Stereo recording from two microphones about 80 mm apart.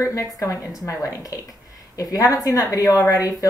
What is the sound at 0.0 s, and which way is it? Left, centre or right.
Speech, left.